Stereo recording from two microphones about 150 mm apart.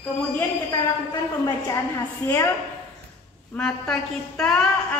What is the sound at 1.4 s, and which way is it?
A woman's voice, 25° left (ahead or behind).